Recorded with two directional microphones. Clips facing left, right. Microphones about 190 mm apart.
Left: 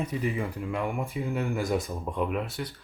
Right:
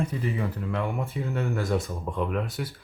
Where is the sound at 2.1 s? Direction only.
5° left (ahead or behind).